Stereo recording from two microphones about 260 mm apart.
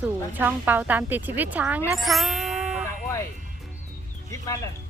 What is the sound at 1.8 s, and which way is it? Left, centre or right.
Music, centre.